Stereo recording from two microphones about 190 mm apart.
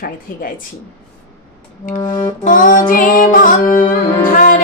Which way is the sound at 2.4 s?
45° left (ahead or behind).